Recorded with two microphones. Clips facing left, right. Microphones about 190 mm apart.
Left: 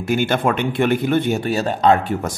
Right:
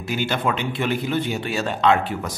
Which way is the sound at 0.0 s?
50° left (ahead or behind).